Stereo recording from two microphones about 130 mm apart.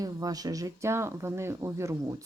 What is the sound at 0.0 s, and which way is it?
Speech, 30° right (ahead or behind).